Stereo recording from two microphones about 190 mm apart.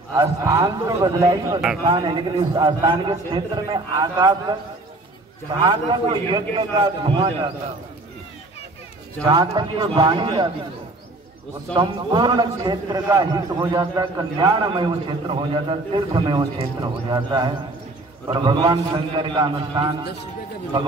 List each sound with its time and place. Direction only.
0.1 s a man's voice: 15° right (ahead or behind)
5.6 s a man's voice: 25° right (ahead or behind)
9.3 s a man's voice: 20° right (ahead or behind)
11.7 s a man's voice: 25° right (ahead or behind)